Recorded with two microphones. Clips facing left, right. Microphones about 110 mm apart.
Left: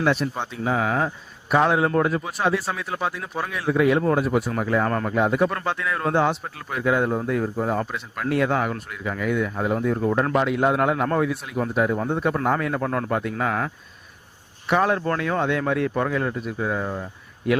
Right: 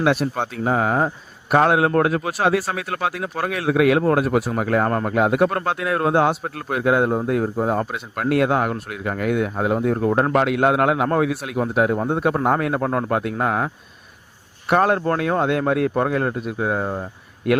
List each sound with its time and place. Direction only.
0.0 s speech: 60° right (ahead or behind)
1.5 s speech: 60° right (ahead or behind)
4.9 s speech: 35° right (ahead or behind)
5.1 s speech: 60° right (ahead or behind)
10.3 s a man's voice: 70° right (ahead or behind)
11.7 s speech: 55° right (ahead or behind)
12.8 s speech: 35° right (ahead or behind)
13.1 s speech: 55° right (ahead or behind)
14.7 s speech: 50° right (ahead or behind)
16.8 s speech: 35° right (ahead or behind)